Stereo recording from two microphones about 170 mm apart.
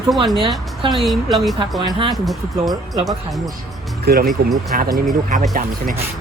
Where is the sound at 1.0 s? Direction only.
Centre (ahead or behind).